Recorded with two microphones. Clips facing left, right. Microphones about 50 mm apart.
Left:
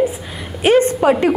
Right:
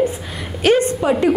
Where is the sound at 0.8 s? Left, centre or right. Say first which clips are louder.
Left 3 dB; left.